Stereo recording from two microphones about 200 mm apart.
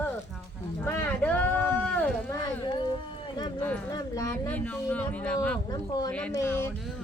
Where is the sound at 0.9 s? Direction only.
10° left (ahead or behind).